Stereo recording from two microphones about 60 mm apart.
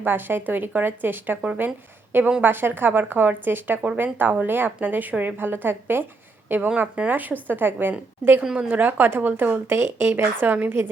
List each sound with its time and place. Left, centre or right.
0.0 s a woman's voice: right
6.7 s a woman's voice: centre
8.5 s a woman's voice: right
8.8 s a woman's voice: right